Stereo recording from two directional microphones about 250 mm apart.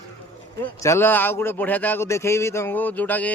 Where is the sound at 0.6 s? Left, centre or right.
Centre.